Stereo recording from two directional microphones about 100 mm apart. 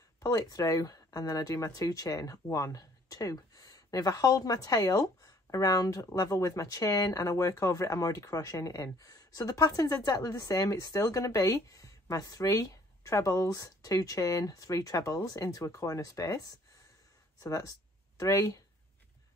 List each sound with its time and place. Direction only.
0.2 s speech: 35° left (ahead or behind)